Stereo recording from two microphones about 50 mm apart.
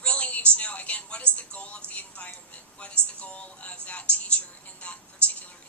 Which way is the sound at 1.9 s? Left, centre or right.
Left.